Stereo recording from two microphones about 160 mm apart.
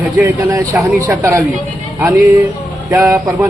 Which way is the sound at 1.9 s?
15° right (ahead or behind).